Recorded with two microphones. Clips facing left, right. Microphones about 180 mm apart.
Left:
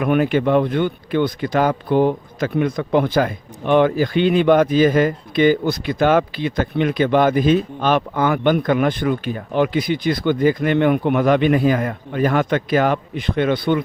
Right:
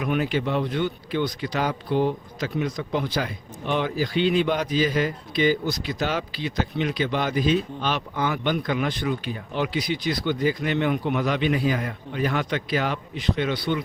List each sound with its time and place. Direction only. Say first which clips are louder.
0.0 s a man's voice: left 7 dB; 55° left (ahead or behind)